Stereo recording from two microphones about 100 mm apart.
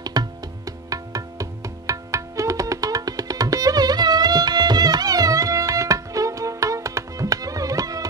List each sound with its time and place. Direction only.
0.0 s music: 40° right (ahead or behind)